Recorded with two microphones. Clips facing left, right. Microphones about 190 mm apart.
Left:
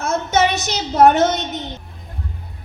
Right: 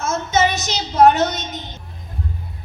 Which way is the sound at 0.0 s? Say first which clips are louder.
Left 1 dB; 60° left (ahead or behind).